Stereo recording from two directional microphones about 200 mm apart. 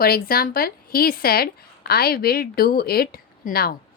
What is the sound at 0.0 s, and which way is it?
A woman's voice, 50° left (ahead or behind).